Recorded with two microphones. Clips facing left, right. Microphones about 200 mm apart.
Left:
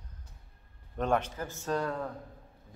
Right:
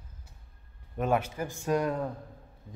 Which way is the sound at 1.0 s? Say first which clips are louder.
Right 1 dB; 10° right (ahead or behind).